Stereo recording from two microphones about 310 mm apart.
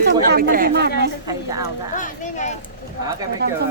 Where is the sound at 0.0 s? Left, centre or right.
Right.